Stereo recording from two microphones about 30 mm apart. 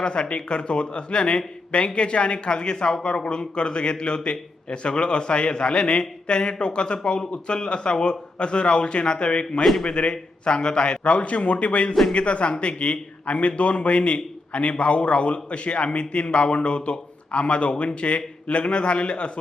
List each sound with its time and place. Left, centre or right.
0.0 s speech: left
11.0 s a man's voice: left